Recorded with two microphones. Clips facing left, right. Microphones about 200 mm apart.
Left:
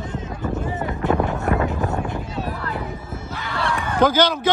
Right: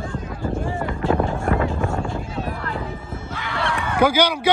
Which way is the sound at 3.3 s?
35° left (ahead or behind).